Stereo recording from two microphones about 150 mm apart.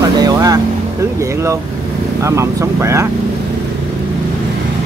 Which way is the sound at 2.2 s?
20° right (ahead or behind).